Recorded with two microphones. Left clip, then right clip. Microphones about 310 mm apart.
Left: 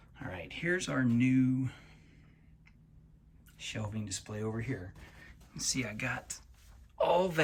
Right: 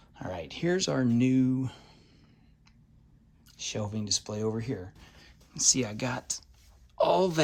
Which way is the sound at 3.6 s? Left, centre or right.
Centre.